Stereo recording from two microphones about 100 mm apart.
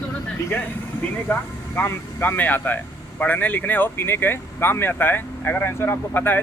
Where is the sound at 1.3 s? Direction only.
15° left (ahead or behind).